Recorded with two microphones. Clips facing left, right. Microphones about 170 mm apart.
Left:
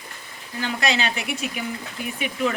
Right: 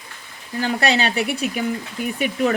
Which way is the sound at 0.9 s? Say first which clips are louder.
Right 4 dB; 35° right (ahead or behind).